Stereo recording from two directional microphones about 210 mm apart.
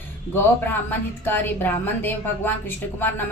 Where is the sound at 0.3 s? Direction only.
10° left (ahead or behind).